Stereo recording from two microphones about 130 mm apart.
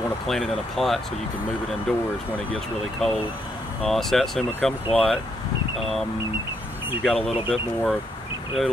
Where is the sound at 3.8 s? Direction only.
Centre (ahead or behind).